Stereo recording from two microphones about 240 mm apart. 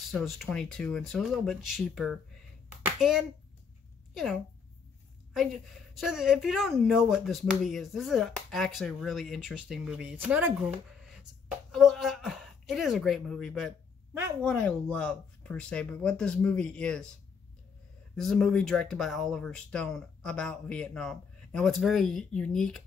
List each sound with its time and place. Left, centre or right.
0.1 s a woman's voice: centre
2.8 s clapping: centre
4.1 s a woman's voice: centre
18.1 s a woman's voice: centre